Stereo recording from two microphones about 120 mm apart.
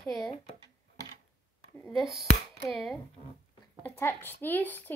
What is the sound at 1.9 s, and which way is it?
Speech, centre (ahead or behind).